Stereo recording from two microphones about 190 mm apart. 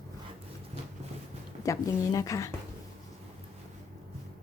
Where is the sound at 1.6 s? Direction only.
15° left (ahead or behind).